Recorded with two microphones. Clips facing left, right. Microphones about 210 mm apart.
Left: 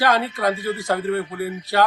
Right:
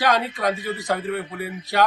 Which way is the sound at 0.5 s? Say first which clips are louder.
Left 3 dB; 20° right (ahead or behind).